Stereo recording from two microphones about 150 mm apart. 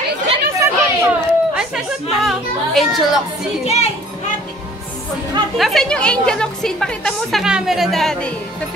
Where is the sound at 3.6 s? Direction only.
45° left (ahead or behind).